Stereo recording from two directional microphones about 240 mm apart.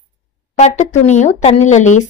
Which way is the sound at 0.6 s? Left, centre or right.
Left.